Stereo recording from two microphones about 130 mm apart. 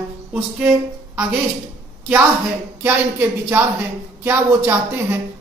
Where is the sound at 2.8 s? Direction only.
15° right (ahead or behind).